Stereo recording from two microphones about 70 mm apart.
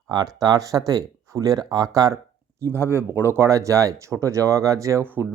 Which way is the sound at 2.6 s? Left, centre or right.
Right.